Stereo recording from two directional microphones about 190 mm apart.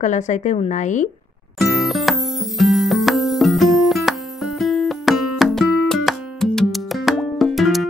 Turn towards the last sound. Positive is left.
turn(degrees=0)  # may be behind; listen again after turning